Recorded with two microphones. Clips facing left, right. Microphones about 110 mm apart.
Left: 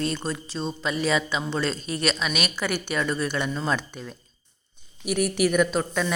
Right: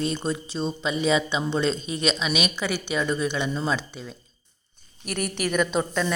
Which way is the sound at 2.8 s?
15° right (ahead or behind).